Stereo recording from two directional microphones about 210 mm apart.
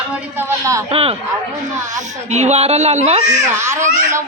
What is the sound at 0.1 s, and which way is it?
Speech, 10° right (ahead or behind).